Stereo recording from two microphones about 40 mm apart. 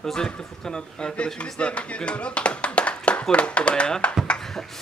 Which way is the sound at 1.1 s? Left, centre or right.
Left.